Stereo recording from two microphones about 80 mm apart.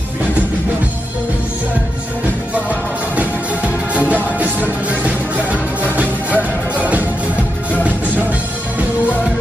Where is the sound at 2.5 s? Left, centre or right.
Centre.